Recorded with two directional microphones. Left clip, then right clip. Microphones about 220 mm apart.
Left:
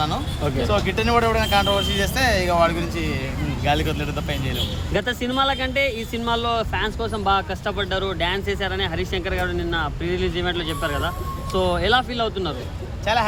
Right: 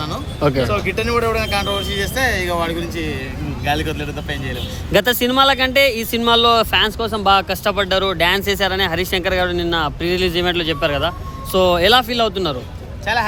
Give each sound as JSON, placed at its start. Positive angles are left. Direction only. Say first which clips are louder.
{"t": 0.7, "sound": "speech", "louder": "right 1 dB", "side_deg": 5}
{"t": 4.9, "sound": "speech", "louder": "right 10 dB", "side_deg": -50}
{"t": 13.1, "sound": "speech", "louder": "right 2 dB", "side_deg": 0}